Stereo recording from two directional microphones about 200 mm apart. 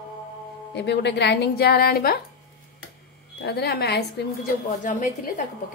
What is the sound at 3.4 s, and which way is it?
Speech, 55° left (ahead or behind).